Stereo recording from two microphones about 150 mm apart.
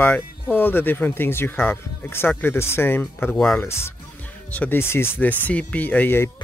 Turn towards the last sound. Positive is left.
turn(degrees=15)  # may be behind; listen again after turning